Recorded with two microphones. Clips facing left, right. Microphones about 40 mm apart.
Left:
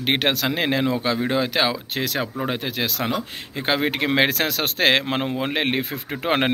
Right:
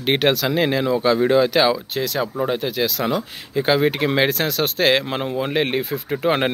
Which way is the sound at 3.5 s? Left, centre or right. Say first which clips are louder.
Right 5 dB; left.